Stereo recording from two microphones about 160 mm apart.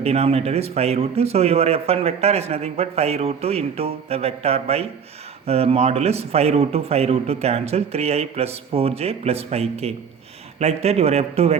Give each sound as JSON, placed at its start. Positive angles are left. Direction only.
{"t": 0.0, "sound": "speech", "side_deg": -40}